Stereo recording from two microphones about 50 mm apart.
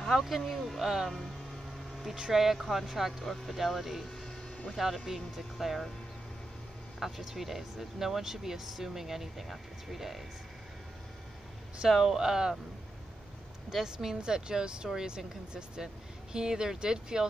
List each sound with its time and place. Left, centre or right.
0.2 s speech: centre
7.0 s speech: centre
12.0 s speech: centre
13.7 s speech: centre